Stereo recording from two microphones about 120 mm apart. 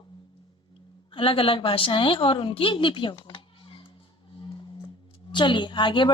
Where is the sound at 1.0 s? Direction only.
45° left (ahead or behind).